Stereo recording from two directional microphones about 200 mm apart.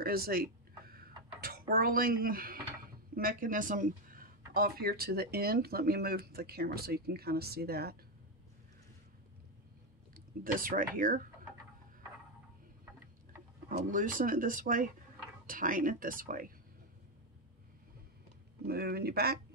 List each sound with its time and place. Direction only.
0.0 s a sound: 50° right (ahead or behind)
4.6 s speech: 50° right (ahead or behind)
10.1 s speech: 45° right (ahead or behind)
13.7 s speech: 40° right (ahead or behind)
18.7 s speech: 50° right (ahead or behind)